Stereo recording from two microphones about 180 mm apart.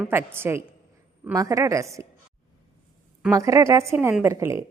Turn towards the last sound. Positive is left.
turn(degrees=-15)  # may be behind; listen again after turning